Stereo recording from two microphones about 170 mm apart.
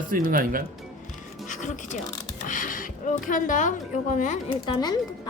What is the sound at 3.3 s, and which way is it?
A woman's voice, 50° left (ahead or behind).